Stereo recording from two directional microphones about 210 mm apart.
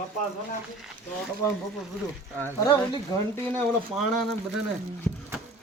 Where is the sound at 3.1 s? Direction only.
20° left (ahead or behind).